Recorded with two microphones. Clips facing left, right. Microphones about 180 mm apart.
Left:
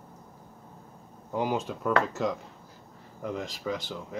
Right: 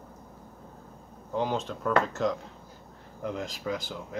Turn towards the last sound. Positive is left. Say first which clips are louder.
# even
turn(degrees=0)  # may be behind; listen again after turning